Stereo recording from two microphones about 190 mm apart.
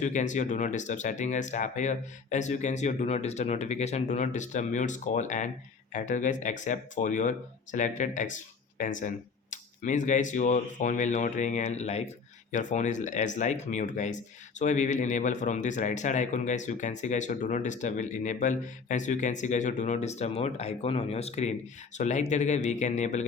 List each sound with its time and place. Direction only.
0.0 s speech: 40° left (ahead or behind)